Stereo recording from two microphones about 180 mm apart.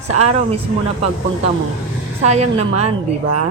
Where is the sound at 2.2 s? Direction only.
40° right (ahead or behind).